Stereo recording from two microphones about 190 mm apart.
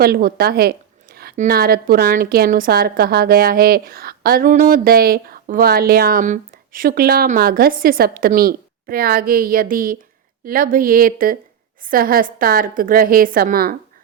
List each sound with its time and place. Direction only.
0.0 s a woman's voice: 50° right (ahead or behind)